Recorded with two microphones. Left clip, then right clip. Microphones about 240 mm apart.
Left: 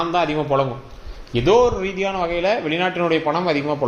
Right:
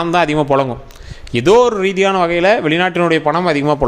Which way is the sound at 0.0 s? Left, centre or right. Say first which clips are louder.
Right 6 dB; right.